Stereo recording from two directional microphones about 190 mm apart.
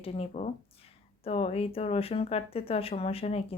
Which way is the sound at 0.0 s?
30° left (ahead or behind).